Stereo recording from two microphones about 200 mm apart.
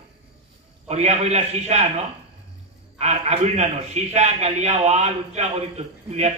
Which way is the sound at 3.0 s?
30° right (ahead or behind).